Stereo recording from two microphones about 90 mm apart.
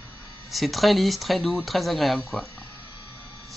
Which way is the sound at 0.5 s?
Centre (ahead or behind).